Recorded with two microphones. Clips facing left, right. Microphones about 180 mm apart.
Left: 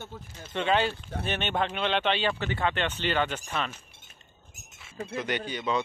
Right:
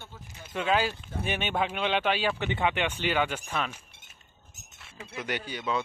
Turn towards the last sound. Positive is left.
turn(degrees=-5)  # may be behind; listen again after turning